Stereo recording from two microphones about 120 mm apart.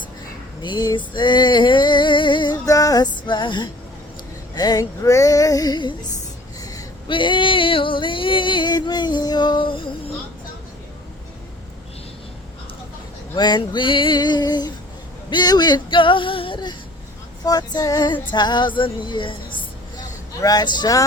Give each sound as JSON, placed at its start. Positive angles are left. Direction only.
{"t": 0.6, "sound": "female singing", "side_deg": 35}
{"t": 2.6, "sound": "music", "side_deg": 30}
{"t": 6.6, "sound": "a sound", "side_deg": 30}
{"t": 7.1, "sound": "music", "side_deg": 45}
{"t": 13.3, "sound": "male singing", "side_deg": 35}
{"t": 15.3, "sound": "a sound", "side_deg": 35}
{"t": 17.4, "sound": "female singing", "side_deg": 35}
{"t": 20.4, "sound": "male singing", "side_deg": 35}